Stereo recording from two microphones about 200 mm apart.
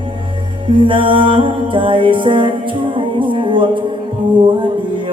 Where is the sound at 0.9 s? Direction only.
25° right (ahead or behind).